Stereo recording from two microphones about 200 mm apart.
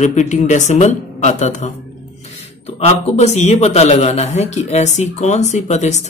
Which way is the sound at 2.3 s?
30° left (ahead or behind).